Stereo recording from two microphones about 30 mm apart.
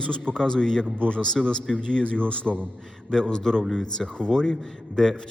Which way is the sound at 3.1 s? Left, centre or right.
Left.